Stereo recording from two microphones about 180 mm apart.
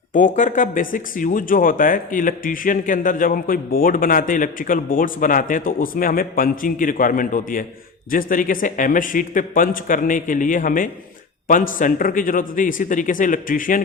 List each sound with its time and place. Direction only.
0.1 s speech: 45° left (ahead or behind)